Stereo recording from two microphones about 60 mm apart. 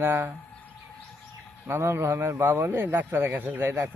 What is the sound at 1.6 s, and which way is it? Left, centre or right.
A man's voice, right.